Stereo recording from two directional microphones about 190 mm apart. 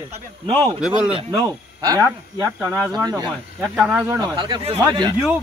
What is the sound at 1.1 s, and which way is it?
Speech, 20° right (ahead or behind).